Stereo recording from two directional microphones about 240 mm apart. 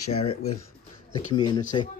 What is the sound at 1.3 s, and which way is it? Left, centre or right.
Speech, centre.